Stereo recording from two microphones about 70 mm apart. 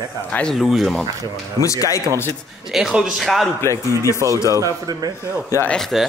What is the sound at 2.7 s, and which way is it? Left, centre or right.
Speech, centre.